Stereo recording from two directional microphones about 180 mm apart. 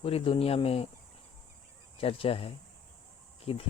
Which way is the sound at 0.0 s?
30° left (ahead or behind).